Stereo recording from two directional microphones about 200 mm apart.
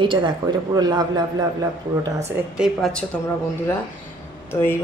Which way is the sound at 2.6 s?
Centre (ahead or behind).